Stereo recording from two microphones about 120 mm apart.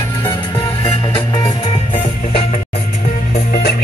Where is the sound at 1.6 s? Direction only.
60° left (ahead or behind).